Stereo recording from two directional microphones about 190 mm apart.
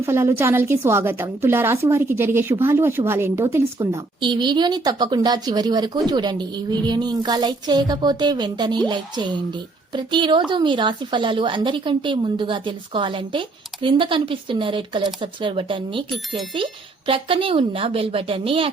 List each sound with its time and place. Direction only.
0.0 s a woman's voice: 15° right (ahead or behind)
17.1 s a woman's voice: 30° right (ahead or behind)